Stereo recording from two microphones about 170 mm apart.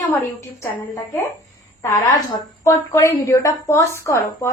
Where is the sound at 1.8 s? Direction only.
15° left (ahead or behind).